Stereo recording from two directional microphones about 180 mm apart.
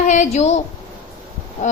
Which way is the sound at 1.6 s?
40° left (ahead or behind).